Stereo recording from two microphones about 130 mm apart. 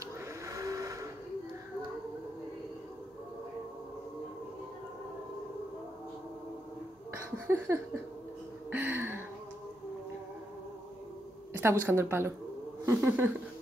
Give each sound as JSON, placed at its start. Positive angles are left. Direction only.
{"t": 0.5, "sound": "vehicle", "side_deg": -25}
{"t": 7.2, "sound": "a sound", "side_deg": -20}
{"t": 11.8, "sound": "a woman's voice", "side_deg": -20}